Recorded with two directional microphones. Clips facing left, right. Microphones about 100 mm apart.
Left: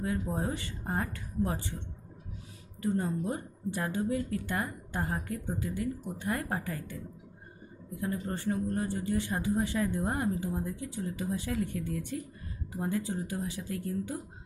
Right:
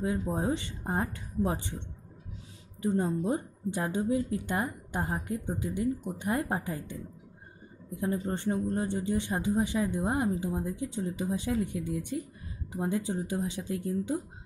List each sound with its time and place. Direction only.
0.3 s speech: 20° right (ahead or behind)